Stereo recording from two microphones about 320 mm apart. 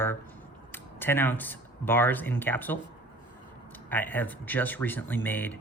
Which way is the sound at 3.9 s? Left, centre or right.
Centre.